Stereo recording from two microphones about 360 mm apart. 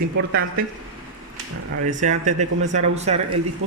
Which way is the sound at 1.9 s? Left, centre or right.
Centre.